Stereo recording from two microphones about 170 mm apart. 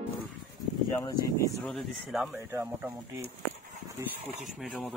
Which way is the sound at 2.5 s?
10° right (ahead or behind).